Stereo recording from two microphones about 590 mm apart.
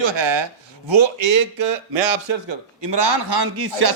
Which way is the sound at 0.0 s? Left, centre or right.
Right.